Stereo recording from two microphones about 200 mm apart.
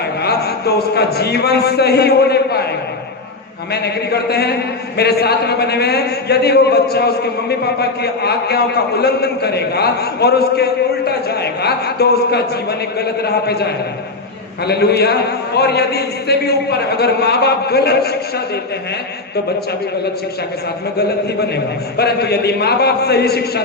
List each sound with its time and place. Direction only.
0.3 s a man's voice: 55° left (ahead or behind)
3.7 s a man's voice: 55° left (ahead or behind)
14.7 s a man's voice: 55° left (ahead or behind)
21.9 s a man's voice: 55° left (ahead or behind)